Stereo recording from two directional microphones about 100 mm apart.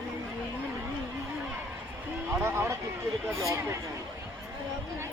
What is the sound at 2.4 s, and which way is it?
Speech, 25° right (ahead or behind).